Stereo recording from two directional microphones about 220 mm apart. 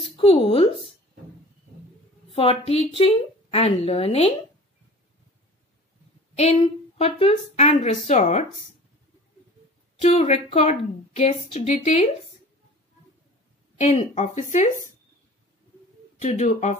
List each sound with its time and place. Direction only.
0.0 s speech: 25° left (ahead or behind)
2.3 s a woman's voice: 25° left (ahead or behind)
6.3 s a woman's voice: 30° left (ahead or behind)
10.0 s a woman's voice: 30° left (ahead or behind)
13.7 s speech: 30° left (ahead or behind)
16.2 s speech: 30° left (ahead or behind)